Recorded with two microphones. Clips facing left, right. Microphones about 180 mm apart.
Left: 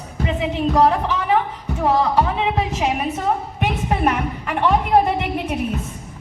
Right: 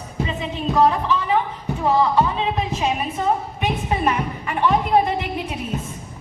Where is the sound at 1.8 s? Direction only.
80° left.